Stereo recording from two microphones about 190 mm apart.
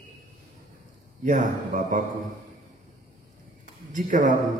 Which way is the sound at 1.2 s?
40° right (ahead or behind).